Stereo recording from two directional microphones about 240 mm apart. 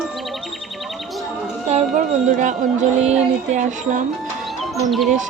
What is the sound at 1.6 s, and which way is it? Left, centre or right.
A woman's voice, right.